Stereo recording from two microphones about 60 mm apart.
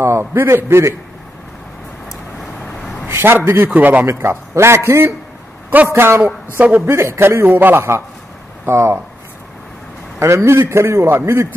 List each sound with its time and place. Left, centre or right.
0.0 s a man's voice: right
3.1 s a man's voice: right
3.7 s a man's voice: right
4.0 s a man's voice: right
10.1 s a man's voice: right